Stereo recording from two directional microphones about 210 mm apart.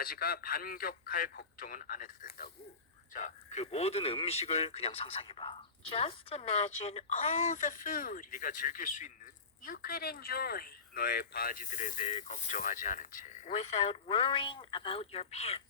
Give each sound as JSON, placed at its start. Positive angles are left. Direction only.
{"t": 0.0, "sound": "a man's voice", "side_deg": 45}